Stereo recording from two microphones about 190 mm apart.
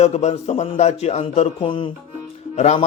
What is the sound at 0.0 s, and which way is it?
Speech, 35° left (ahead or behind).